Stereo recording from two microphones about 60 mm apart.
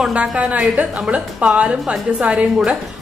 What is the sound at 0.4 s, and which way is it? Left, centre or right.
A woman's voice, right.